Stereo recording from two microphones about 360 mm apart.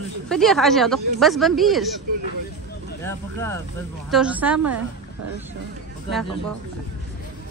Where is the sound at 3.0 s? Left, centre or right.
Centre.